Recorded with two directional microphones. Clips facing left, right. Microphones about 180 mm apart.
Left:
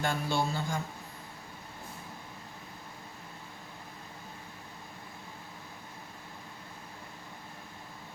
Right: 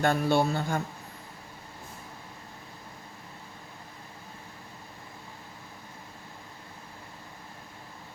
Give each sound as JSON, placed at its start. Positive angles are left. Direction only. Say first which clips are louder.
{"t": 0.0, "sound": "a man's voice", "louder": "right 7 dB", "side_deg": -60}